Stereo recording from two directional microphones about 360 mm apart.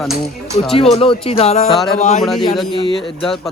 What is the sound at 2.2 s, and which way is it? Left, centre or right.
Speech, centre.